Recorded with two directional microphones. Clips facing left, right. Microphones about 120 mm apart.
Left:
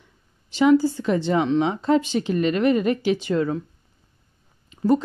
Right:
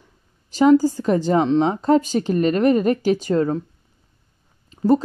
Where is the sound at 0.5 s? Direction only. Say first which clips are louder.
Right 3 dB; 40° right (ahead or behind).